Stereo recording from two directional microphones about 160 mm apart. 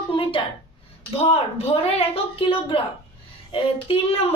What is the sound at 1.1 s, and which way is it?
Speech, 40° left (ahead or behind).